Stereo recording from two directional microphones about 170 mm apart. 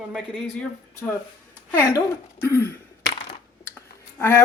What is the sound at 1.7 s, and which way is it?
Speech, 15° left (ahead or behind).